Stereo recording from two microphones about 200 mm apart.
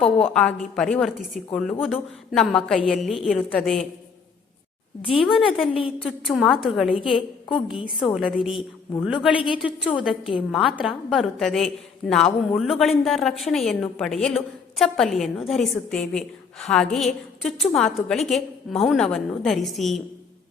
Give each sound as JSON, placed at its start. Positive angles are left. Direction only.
{"t": 0.3, "sound": "a woman's voice", "side_deg": 5}
{"t": 5.1, "sound": "a woman's voice", "side_deg": 0}
{"t": 7.1, "sound": "a woman's voice", "side_deg": 25}
{"t": 7.9, "sound": "a woman's voice", "side_deg": 0}
{"t": 9.3, "sound": "a woman's voice", "side_deg": 25}
{"t": 9.6, "sound": "a woman's voice", "side_deg": -5}